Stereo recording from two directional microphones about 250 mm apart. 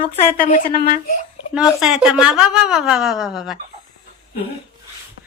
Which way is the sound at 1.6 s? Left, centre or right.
Centre.